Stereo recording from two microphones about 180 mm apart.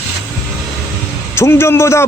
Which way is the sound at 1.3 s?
15° left (ahead or behind).